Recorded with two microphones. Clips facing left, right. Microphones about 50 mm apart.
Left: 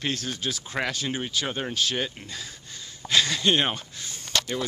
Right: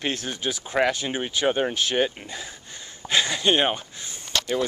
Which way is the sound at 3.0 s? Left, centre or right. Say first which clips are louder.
Right 1 dB; centre.